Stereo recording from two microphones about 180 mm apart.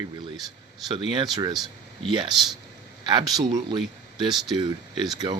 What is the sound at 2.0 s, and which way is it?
Speech, 25° right (ahead or behind).